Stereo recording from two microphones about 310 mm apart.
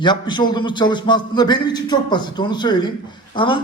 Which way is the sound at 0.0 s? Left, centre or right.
Centre.